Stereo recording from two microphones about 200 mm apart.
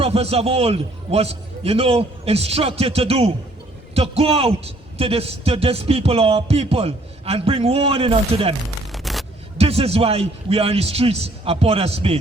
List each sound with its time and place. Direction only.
0.0 s a man's voice: 30° right (ahead or behind)
8.9 s a sound: centre (ahead or behind)
9.6 s a man's voice: 30° right (ahead or behind)